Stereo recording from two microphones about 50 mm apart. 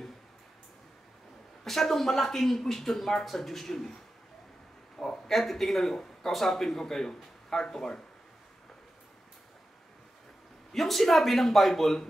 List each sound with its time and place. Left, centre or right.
1.6 s speech: centre
4.9 s speech: centre
10.7 s speech: centre